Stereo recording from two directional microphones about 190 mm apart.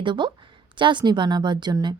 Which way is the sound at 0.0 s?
25° right (ahead or behind).